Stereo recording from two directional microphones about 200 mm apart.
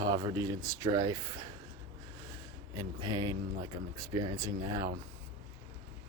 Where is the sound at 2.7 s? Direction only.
20° right (ahead or behind).